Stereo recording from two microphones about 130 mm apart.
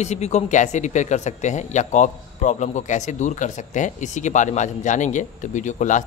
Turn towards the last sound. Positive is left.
turn(degrees=70)  # may be behind; listen again after turning